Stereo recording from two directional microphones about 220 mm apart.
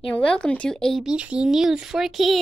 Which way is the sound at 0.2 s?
5° left (ahead or behind).